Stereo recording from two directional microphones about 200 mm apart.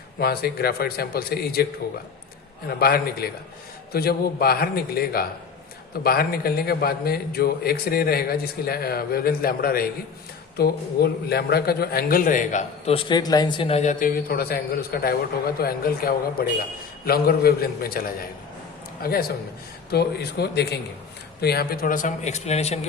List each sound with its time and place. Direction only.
0.2 s a man's voice: 50° left (ahead or behind)
2.6 s a man's voice: 50° left (ahead or behind); by 22.9 s 35° left (ahead or behind)